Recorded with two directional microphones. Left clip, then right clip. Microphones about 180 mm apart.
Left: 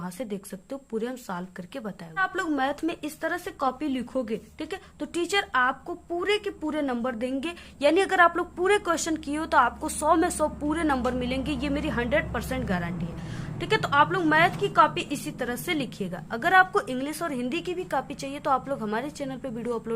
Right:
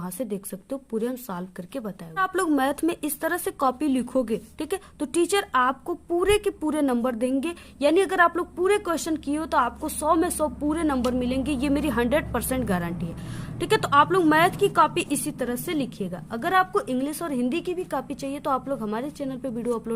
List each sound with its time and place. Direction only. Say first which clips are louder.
0.0 s a woman's voice: right 3 dB; 30° right (ahead or behind)
2.1 s a woman's voice: right 3 dB; 40° right (ahead or behind); by 19.8 s 25° right (ahead or behind)